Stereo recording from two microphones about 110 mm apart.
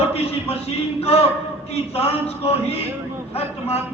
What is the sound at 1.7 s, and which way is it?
A man's voice, 65° left (ahead or behind).